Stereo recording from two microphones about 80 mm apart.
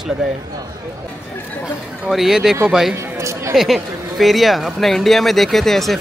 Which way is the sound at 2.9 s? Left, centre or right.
Right.